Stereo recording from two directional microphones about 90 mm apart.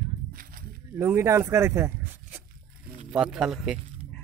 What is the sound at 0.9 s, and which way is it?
Speech, 30° right (ahead or behind).